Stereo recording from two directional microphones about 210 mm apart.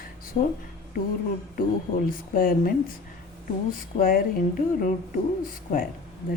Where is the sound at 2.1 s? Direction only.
40° left (ahead or behind).